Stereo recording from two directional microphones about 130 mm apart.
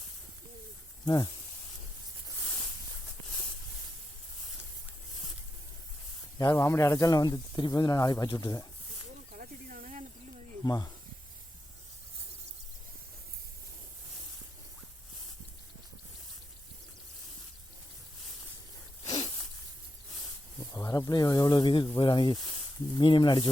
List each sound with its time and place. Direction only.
1.0 s speech: 30° left (ahead or behind)
6.4 s speech: 25° left (ahead or behind)
9.3 s snake: 90° right
10.6 s speech: 30° left (ahead or behind)
19.0 s a sound: 50° left (ahead or behind)
20.7 s speech: 30° left (ahead or behind)